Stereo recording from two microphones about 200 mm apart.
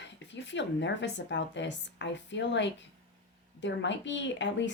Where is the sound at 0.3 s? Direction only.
65° left (ahead or behind).